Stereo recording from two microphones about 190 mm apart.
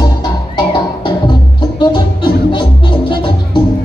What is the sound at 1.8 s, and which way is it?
Music, 25° left (ahead or behind).